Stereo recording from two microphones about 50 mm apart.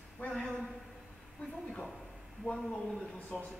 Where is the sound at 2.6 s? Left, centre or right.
Centre.